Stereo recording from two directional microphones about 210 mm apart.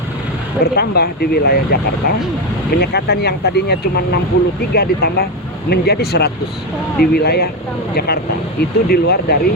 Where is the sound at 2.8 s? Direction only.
50° left (ahead or behind).